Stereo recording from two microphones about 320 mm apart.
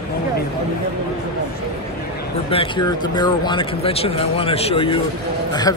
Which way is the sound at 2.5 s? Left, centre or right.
Centre.